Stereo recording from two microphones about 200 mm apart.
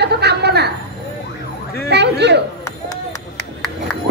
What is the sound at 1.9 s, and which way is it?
Speech, 55° right (ahead or behind).